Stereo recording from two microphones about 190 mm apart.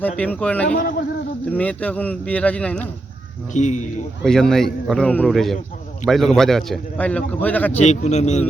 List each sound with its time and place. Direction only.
0.2 s speech: 5° left (ahead or behind)
0.7 s a man's voice: 50° left (ahead or behind)
1.5 s speech: 5° left (ahead or behind)
3.5 s a man's voice: 40° left (ahead or behind)
4.2 s a man's voice: centre (ahead or behind)
7.8 s a man's voice: 35° left (ahead or behind)